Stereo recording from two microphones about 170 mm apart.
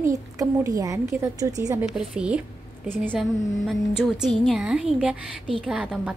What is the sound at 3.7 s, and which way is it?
A woman's voice, centre (ahead or behind).